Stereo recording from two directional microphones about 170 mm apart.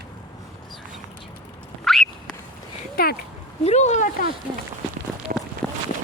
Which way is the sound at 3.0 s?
65° left (ahead or behind).